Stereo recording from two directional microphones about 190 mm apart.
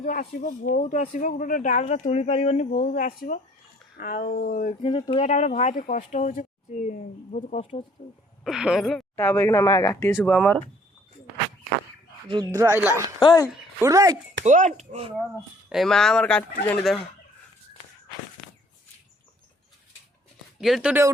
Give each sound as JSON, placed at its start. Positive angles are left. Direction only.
{"t": 0.0, "sound": "speech", "side_deg": 45}
{"t": 4.8, "sound": "speech", "side_deg": 25}
{"t": 8.4, "sound": "speech", "side_deg": -5}
{"t": 12.3, "sound": "speech", "side_deg": -20}
{"t": 13.1, "sound": "speech", "side_deg": 20}
{"t": 13.8, "sound": "speech", "side_deg": -20}
{"t": 14.4, "sound": "speech", "side_deg": -40}
{"t": 15.7, "sound": "speech", "side_deg": 0}
{"t": 20.6, "sound": "speech", "side_deg": 0}